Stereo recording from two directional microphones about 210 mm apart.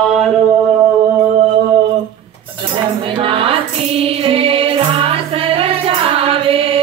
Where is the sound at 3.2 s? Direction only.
25° right (ahead or behind).